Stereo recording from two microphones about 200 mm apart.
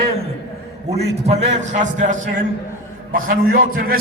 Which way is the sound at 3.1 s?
45° right (ahead or behind).